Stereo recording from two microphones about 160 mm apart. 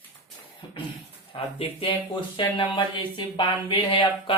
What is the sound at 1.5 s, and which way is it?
Speech, 35° left (ahead or behind).